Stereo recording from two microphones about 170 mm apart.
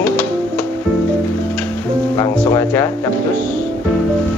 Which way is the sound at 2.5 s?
15° left (ahead or behind).